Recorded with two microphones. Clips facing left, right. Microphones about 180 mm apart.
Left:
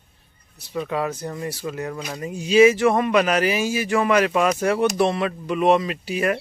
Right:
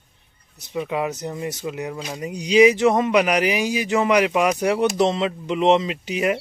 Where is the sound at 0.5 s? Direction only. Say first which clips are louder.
Right 1 dB; 15° right (ahead or behind).